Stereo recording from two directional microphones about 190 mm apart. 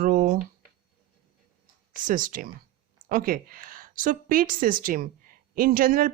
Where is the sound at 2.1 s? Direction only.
45° right (ahead or behind).